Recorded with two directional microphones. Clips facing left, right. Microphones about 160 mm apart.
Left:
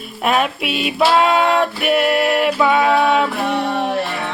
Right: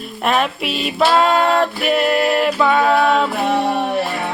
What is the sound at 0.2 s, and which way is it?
Music, centre (ahead or behind).